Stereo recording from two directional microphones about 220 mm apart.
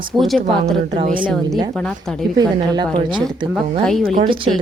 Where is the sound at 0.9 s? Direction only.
25° right (ahead or behind).